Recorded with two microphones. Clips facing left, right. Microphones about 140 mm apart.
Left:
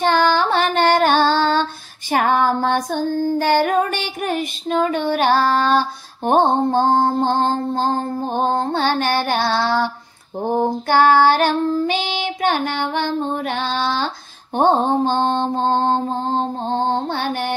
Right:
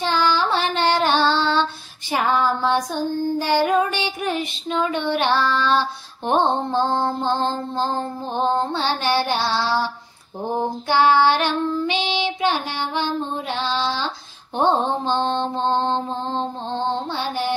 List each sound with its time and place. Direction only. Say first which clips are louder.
0.0 s child singing: left 4 dB; 55° left (ahead or behind)
14.5 s mantra: left 4 dB; 50° left (ahead or behind)